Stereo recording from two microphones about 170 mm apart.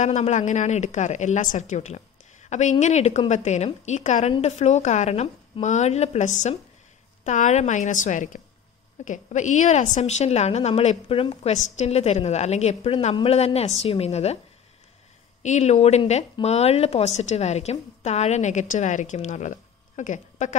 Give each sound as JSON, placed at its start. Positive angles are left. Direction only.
{"t": 0.0, "sound": "a woman's voice", "side_deg": 45}
{"t": 15.4, "sound": "a woman's voice", "side_deg": 45}